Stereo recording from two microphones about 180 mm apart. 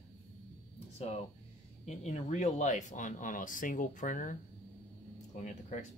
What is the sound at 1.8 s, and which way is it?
Speech, 40° left (ahead or behind).